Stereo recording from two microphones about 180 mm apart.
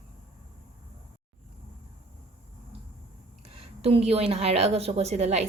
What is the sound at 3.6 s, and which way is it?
Speech, 35° right (ahead or behind).